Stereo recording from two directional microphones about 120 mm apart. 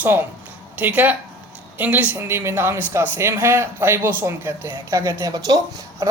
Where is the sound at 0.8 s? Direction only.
15° right (ahead or behind).